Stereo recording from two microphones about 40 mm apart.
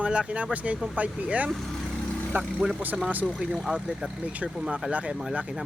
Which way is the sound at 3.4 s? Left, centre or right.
Right.